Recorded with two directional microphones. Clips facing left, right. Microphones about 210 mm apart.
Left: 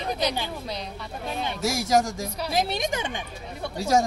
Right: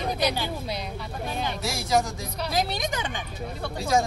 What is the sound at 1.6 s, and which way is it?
Speech, 45° left (ahead or behind).